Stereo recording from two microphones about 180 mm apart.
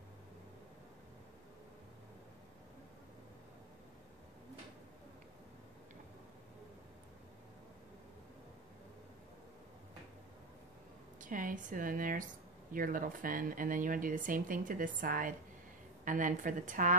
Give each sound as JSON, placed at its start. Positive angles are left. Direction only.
{"t": 11.1, "sound": "speech", "side_deg": -45}